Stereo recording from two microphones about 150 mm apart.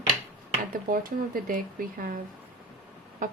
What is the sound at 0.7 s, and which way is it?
Speech, 70° right (ahead or behind).